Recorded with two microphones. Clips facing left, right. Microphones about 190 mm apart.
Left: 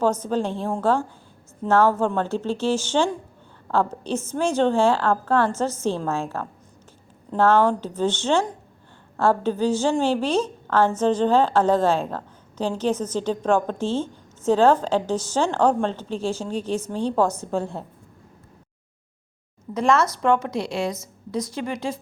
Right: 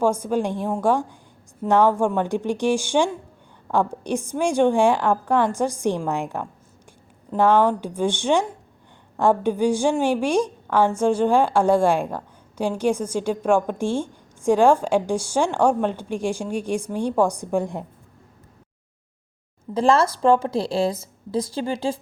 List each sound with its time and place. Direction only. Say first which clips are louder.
0.0 s a woman's voice: right 1 dB; 10° right (ahead or behind)
19.7 s speech: right 2 dB; 30° right (ahead or behind)